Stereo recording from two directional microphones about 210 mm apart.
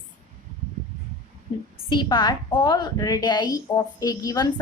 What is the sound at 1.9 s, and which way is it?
A woman's voice, 20° left (ahead or behind).